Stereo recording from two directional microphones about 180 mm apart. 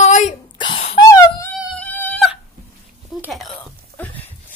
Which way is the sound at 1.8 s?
10° left (ahead or behind).